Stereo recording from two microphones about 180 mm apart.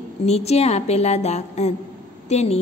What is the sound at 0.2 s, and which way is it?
A woman's voice, 35° left (ahead or behind).